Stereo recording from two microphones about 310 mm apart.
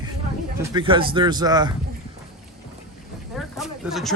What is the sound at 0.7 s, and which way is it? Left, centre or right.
Speech, centre.